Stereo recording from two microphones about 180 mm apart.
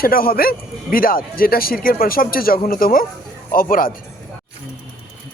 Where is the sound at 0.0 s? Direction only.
55° left (ahead or behind).